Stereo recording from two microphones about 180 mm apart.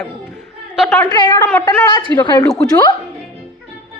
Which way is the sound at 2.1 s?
25° left (ahead or behind).